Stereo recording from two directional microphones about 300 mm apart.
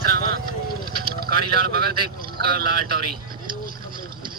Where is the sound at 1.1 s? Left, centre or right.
Right.